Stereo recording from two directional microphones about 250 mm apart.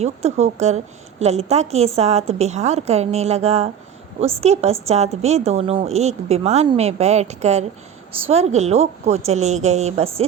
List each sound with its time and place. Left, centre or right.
0.0 s a woman's voice: right